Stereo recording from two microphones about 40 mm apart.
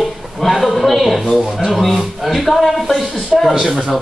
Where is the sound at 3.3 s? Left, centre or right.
Centre.